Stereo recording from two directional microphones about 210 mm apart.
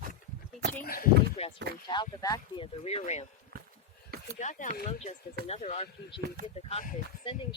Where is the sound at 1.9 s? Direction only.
20° left (ahead or behind).